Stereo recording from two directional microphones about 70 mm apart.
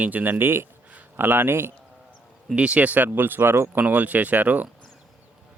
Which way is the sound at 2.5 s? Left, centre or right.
Centre.